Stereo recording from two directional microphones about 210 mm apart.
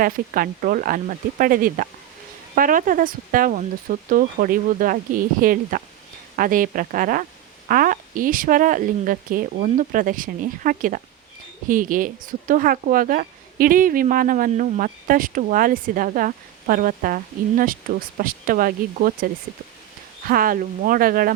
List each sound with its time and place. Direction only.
0.0 s a woman's voice: 40° right (ahead or behind)